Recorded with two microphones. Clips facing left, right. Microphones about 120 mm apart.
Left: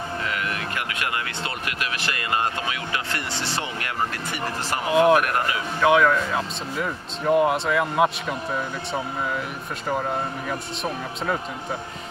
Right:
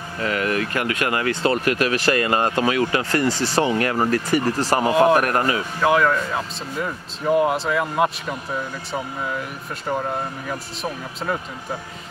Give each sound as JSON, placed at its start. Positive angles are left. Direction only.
{"t": 0.2, "sound": "speech", "side_deg": -45}
{"t": 4.9, "sound": "speech", "side_deg": 0}
{"t": 5.2, "sound": "speech", "side_deg": -45}
{"t": 5.8, "sound": "speech", "side_deg": 0}